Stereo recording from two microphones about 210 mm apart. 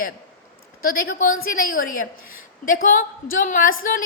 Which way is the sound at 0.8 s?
45° left (ahead or behind).